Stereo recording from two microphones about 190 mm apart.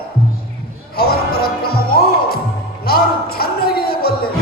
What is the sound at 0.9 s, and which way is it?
Music, 55° left (ahead or behind).